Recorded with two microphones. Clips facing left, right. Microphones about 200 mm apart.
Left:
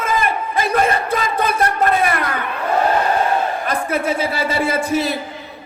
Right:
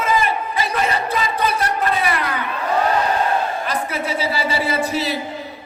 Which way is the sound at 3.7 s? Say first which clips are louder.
Left 4 dB; 50° left (ahead or behind).